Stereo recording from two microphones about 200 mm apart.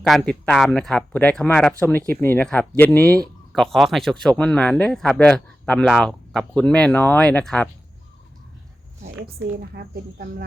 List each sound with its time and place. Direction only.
0.0 s speech: 5° left (ahead or behind)
9.2 s a woman's voice: 50° right (ahead or behind)